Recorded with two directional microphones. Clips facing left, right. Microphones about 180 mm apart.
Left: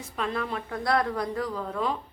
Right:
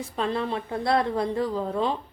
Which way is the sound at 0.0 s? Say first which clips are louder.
Right 4 dB; 30° right (ahead or behind).